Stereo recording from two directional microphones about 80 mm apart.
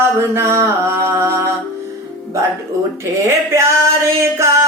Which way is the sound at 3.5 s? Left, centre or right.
Right.